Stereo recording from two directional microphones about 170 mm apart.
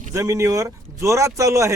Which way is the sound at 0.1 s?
20° right (ahead or behind).